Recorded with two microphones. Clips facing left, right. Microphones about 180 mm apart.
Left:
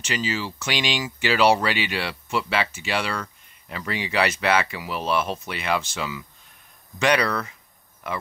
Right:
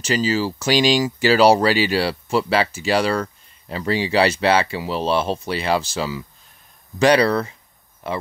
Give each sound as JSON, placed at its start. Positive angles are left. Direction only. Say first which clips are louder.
{"t": 0.0, "sound": "speech", "louder": "right 7 dB", "side_deg": -35}